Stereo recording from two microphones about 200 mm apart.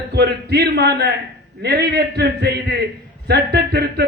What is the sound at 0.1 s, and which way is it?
Speech, 55° right (ahead or behind).